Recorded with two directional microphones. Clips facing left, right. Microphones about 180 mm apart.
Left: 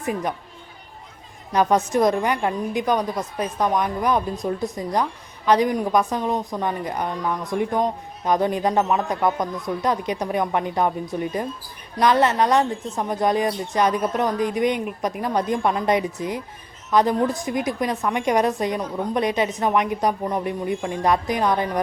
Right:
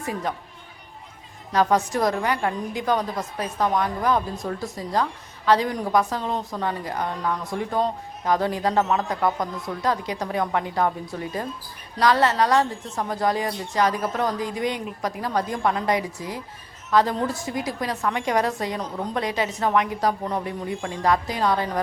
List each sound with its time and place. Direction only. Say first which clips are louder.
0.0 s a woman's voice: left 3 dB; 15° left (ahead or behind)
1.5 s a woman's voice: left 2 dB; 20° left (ahead or behind)